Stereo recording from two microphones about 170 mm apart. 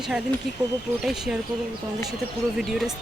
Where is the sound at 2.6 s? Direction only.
Centre (ahead or behind).